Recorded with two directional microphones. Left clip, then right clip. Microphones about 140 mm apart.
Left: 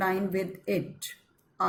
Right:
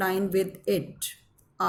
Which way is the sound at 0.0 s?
60° right (ahead or behind).